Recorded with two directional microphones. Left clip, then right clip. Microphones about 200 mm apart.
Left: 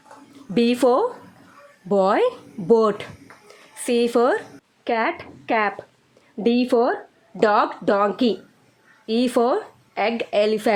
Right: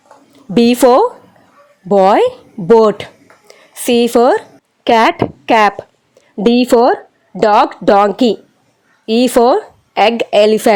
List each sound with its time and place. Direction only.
0.5 s a woman's voice: 30° right (ahead or behind)